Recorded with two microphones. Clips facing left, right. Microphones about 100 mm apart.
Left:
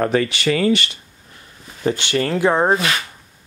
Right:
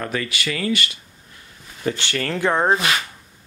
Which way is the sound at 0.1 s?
30° left (ahead or behind).